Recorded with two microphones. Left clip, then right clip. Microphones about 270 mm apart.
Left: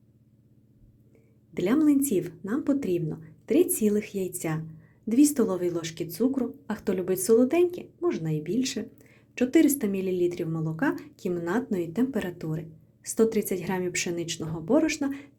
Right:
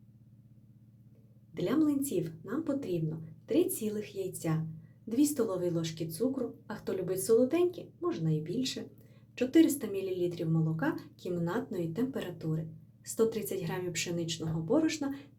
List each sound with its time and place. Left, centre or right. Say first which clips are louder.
1.5 s speech: left 7 dB; left